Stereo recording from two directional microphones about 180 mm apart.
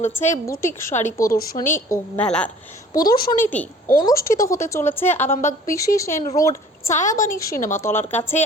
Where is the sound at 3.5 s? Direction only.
10° left (ahead or behind).